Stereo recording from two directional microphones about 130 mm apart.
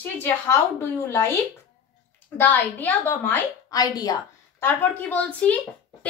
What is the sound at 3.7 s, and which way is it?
Speech, 30° left (ahead or behind).